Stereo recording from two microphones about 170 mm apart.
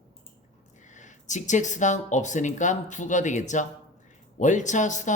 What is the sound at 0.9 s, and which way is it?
Speech, 45° left (ahead or behind).